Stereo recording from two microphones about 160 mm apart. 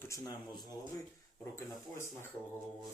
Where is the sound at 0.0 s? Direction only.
20° left (ahead or behind).